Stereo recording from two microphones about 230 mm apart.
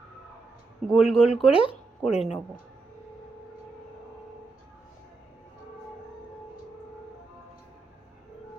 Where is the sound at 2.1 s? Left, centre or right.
Left.